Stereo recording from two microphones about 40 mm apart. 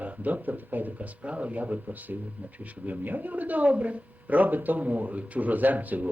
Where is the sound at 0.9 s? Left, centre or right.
Right.